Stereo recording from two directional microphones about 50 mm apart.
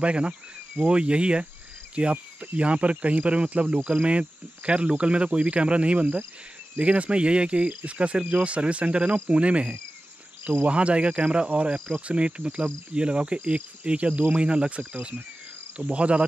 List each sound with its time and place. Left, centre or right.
0.0 s cricket: right
14.8 s speech: right
15.8 s cricket: right